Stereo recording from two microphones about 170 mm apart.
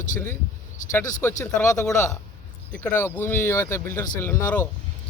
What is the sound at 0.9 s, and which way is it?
Speech, 20° left (ahead or behind).